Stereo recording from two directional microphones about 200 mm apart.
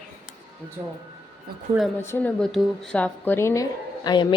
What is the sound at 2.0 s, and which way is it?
A woman's voice, 10° left (ahead or behind).